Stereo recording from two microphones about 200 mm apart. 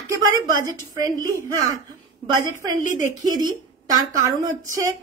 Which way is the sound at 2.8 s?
40° left (ahead or behind).